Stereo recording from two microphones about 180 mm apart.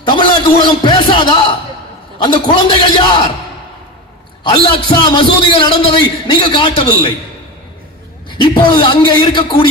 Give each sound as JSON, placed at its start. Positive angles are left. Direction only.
{"t": 0.0, "sound": "a man's voice", "side_deg": 25}
{"t": 5.0, "sound": "a man's voice", "side_deg": 25}
{"t": 8.3, "sound": "a man's voice", "side_deg": 25}